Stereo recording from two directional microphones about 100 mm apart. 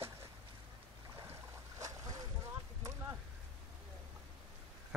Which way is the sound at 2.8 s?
30° right (ahead or behind).